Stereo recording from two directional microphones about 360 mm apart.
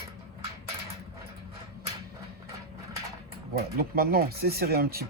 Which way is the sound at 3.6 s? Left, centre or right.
Right.